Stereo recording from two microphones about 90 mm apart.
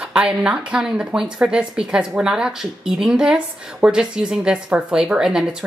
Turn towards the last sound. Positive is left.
turn(degrees=-5)  # may be behind; listen again after turning